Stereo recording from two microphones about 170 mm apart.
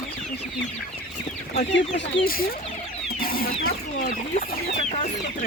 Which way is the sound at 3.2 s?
60° left (ahead or behind).